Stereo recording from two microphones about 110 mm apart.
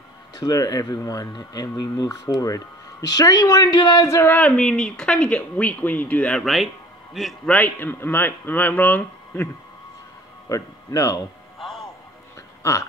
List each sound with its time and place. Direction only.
0.4 s speech: 35° left (ahead or behind)
4.4 s speech: 10° left (ahead or behind)
6.4 s speech: centre (ahead or behind)
7.4 s speech: 15° left (ahead or behind)
10.5 s speech: 30° left (ahead or behind)
11.6 s music: centre (ahead or behind)